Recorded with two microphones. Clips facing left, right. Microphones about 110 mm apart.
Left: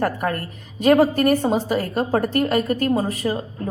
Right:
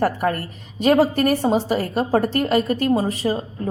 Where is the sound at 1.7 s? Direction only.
25° right (ahead or behind).